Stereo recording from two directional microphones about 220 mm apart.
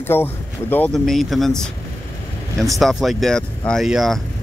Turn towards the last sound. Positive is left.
turn(degrees=0)  # may be behind; listen again after turning